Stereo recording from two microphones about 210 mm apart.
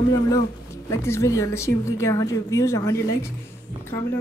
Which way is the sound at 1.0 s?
15° left (ahead or behind).